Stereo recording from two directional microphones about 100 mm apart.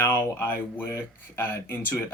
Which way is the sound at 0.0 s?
25° left (ahead or behind).